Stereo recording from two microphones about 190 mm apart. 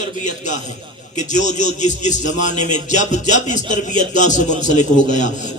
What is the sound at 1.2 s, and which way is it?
A man's voice, 40° left (ahead or behind).